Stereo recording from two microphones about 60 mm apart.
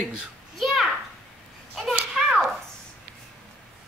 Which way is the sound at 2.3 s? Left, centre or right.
Centre.